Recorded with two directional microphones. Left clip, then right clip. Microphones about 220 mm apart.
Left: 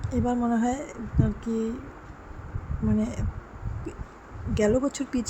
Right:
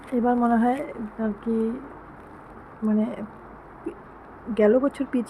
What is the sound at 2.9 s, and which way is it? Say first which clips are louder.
Speech: right 3 dB; 5° left (ahead or behind).